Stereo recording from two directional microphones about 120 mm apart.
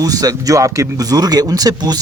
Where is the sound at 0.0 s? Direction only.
30° right (ahead or behind).